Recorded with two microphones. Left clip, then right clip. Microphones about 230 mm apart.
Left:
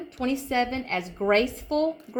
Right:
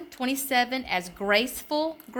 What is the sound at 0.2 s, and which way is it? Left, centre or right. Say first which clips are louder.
A woman's voice: right 1 dB; right.